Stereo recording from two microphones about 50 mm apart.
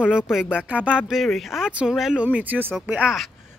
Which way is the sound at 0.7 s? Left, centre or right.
Right.